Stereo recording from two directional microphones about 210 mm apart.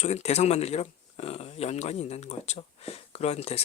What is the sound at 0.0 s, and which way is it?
Speech, 30° left (ahead or behind).